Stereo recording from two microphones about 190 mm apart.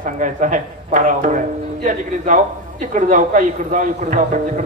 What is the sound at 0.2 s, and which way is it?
A man's voice, 40° right (ahead or behind).